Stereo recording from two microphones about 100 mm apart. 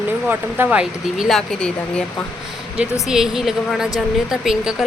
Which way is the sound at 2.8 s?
5° right (ahead or behind).